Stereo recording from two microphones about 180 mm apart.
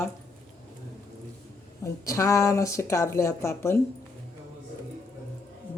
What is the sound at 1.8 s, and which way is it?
Speech, 20° left (ahead or behind).